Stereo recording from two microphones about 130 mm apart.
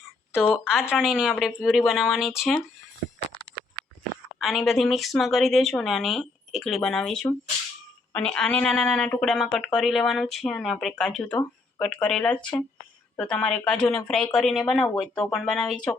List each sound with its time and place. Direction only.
0.6 s speech: 5° right (ahead or behind)
4.4 s speech: centre (ahead or behind)